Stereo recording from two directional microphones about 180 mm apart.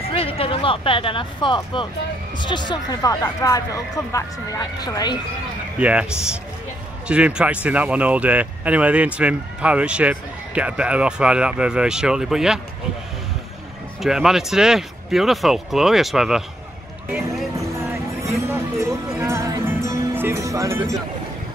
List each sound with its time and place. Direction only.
0.1 s speech: 30° left (ahead or behind)
5.8 s speech: 5° right (ahead or behind)
7.1 s speech: 5° right (ahead or behind)
14.0 s speech: centre (ahead or behind)
18.2 s music: 15° right (ahead or behind)